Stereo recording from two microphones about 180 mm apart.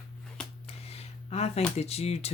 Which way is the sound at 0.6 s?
35° left (ahead or behind).